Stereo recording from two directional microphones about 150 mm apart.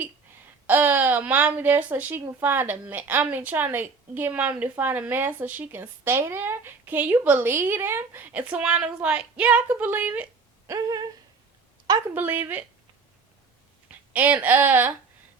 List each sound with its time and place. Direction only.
0.7 s a woman's voice: 15° right (ahead or behind)
10.7 s speech: 25° right (ahead or behind)
12.1 s a woman's voice: 15° right (ahead or behind)
13.8 s a woman's voice: 10° right (ahead or behind)